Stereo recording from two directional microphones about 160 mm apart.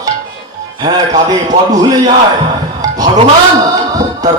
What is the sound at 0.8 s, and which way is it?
A man's voice, 25° right (ahead or behind).